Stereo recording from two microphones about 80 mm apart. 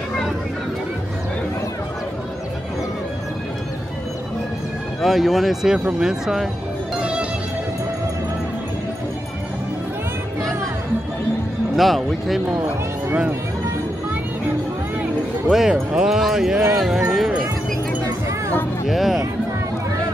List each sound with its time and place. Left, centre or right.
5.0 s speech: centre
7.0 s music: centre
11.7 s speech: centre
12.6 s speech: centre
15.5 s speech: centre
18.9 s speech: centre